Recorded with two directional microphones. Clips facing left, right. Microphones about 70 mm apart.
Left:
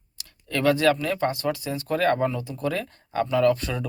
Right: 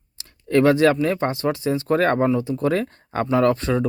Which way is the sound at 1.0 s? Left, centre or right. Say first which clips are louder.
Right 4 dB; right.